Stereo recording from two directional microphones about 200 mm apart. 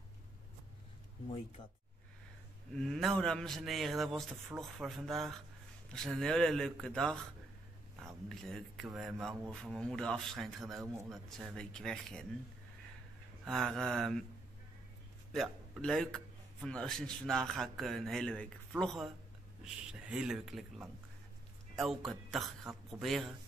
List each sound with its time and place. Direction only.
1.6 s speech: 25° left (ahead or behind)
2.7 s a man's voice: centre (ahead or behind)
13.5 s a man's voice: centre (ahead or behind)
15.3 s a man's voice: centre (ahead or behind)